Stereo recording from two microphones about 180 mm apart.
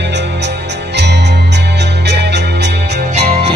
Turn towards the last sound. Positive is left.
turn(degrees=-35)  # may be behind; listen again after turning